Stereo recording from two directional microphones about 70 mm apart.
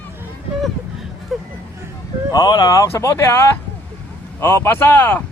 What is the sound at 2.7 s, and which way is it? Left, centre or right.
Speech, left.